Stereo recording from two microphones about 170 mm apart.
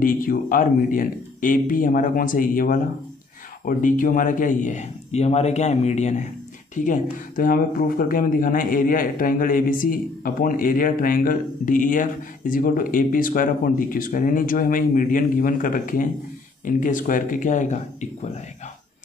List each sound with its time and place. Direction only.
0.0 s a man's voice: 55° left (ahead or behind)